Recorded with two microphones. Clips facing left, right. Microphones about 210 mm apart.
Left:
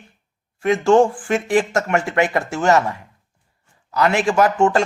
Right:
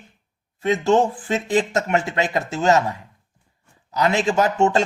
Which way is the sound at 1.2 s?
20° right (ahead or behind).